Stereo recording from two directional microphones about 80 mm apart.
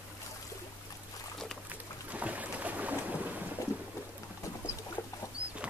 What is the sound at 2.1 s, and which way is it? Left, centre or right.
Boat, centre.